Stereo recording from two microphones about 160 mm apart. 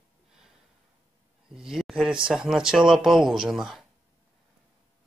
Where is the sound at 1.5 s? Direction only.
5° right (ahead or behind).